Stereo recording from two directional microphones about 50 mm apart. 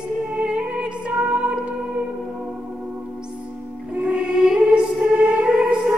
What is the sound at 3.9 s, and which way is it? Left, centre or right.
Music, right.